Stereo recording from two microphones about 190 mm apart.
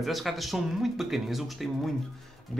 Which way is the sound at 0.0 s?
Centre (ahead or behind).